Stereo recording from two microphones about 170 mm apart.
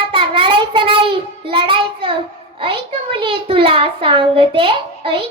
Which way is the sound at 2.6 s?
30° right (ahead or behind).